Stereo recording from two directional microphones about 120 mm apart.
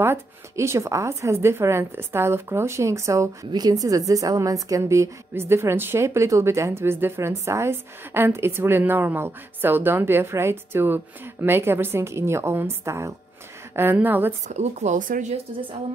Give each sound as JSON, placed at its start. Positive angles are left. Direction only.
{"t": 0.0, "sound": "a woman's voice", "side_deg": -20}
{"t": 14.5, "sound": "speech", "side_deg": -70}